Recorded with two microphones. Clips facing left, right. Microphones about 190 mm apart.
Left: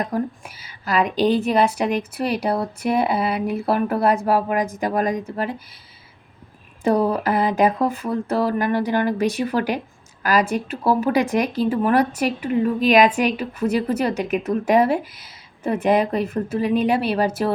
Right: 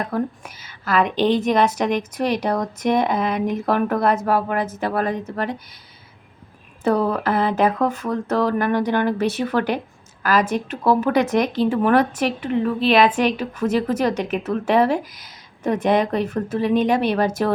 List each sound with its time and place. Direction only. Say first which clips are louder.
0.0 s speech: even; 10° left (ahead or behind)
1.0 s a woman's voice: left 1 dB; 35° left (ahead or behind)
1.4 s speech: even; 10° left (ahead or behind)
6.8 s speech: left 1 dB; 10° left (ahead or behind)